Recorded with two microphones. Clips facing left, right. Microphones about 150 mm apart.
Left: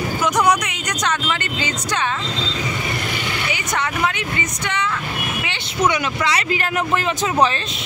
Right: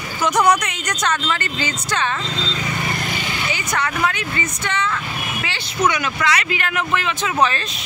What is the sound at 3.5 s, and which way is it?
Speech, 20° left (ahead or behind).